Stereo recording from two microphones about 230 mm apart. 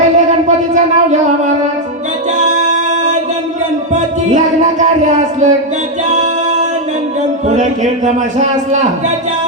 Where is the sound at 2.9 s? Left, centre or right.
Right.